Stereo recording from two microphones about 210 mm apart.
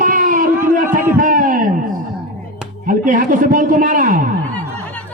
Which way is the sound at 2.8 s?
40° right (ahead or behind).